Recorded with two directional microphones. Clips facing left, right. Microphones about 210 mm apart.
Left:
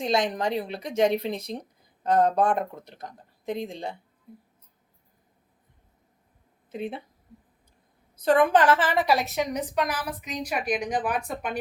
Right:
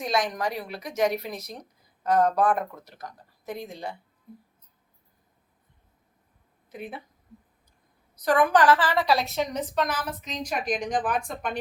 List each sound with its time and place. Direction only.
0.0 s speech: 25° left (ahead or behind)
6.7 s speech: 25° left (ahead or behind)
8.1 s a woman's voice: 25° left (ahead or behind); by 11.2 s 10° left (ahead or behind)